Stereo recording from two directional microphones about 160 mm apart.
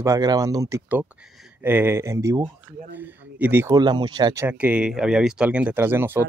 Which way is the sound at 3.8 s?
25° right (ahead or behind).